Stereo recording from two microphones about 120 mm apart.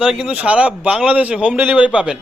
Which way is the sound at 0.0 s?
5° right (ahead or behind).